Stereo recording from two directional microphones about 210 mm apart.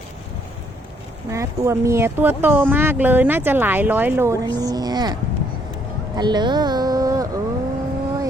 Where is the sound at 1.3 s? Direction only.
15° right (ahead or behind).